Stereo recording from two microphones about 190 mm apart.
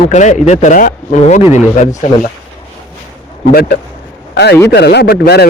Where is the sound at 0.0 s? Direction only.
40° left (ahead or behind).